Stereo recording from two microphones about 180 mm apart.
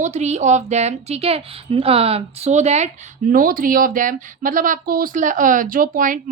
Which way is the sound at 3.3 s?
50° right (ahead or behind).